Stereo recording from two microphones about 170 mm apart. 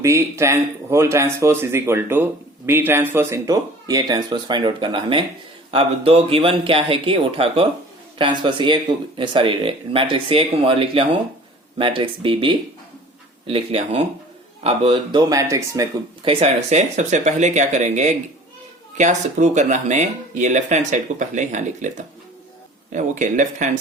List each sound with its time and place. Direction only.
0.0 s speech: 15° right (ahead or behind)
16.2 s speech: 35° right (ahead or behind)